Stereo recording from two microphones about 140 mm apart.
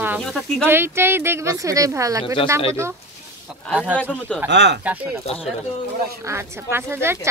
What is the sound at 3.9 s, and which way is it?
Speech, 10° left (ahead or behind).